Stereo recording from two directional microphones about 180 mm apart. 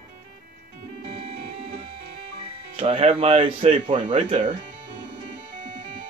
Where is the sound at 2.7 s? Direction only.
30° right (ahead or behind).